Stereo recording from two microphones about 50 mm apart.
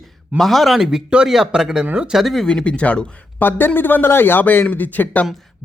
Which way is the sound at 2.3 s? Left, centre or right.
Centre.